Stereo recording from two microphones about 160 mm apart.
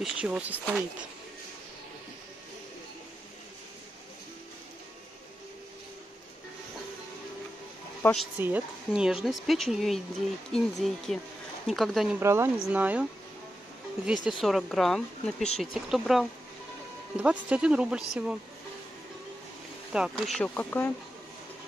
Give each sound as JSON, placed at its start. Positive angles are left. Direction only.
{"t": 0.0, "sound": "speech", "side_deg": -5}
{"t": 8.4, "sound": "speech", "side_deg": -10}
{"t": 12.2, "sound": "speech", "side_deg": -15}
{"t": 14.0, "sound": "speech", "side_deg": -5}
{"t": 19.9, "sound": "speech", "side_deg": -5}
{"t": 20.3, "sound": "speech", "side_deg": 10}